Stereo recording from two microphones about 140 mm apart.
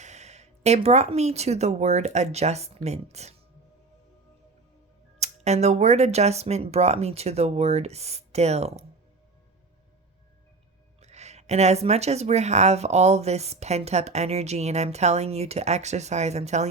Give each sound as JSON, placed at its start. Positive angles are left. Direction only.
{"t": 0.0, "sound": "speech", "side_deg": -55}
{"t": 5.2, "sound": "speech", "side_deg": -55}
{"t": 11.0, "sound": "speech", "side_deg": -50}